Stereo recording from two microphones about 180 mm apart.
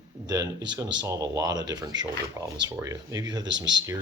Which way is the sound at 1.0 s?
20° right (ahead or behind).